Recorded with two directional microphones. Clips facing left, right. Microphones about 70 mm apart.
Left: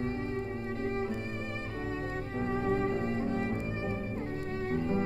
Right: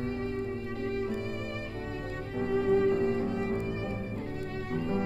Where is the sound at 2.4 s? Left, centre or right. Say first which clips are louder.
Right 5 dB; left.